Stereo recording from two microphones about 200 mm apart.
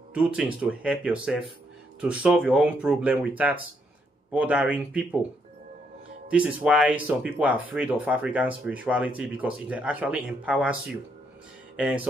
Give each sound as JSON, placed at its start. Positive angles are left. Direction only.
{"t": 0.1, "sound": "speech", "side_deg": -5}
{"t": 6.3, "sound": "speech", "side_deg": -5}